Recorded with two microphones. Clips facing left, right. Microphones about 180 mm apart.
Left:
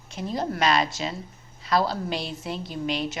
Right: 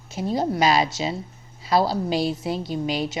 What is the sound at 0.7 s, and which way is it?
Speech, 5° right (ahead or behind).